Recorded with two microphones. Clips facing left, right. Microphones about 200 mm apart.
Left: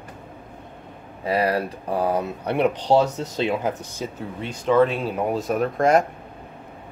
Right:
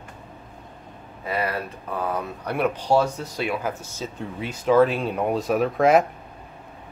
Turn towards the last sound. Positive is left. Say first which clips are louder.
# right 1 dB
turn(degrees=0)  # may be behind; listen again after turning